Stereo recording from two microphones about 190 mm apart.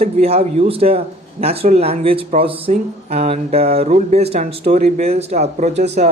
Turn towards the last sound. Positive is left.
turn(degrees=-35)  # may be behind; listen again after turning